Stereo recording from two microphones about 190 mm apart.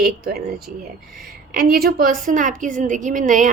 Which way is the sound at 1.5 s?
50° right (ahead or behind).